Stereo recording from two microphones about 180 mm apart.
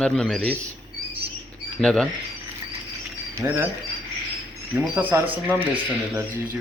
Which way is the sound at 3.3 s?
10° right (ahead or behind).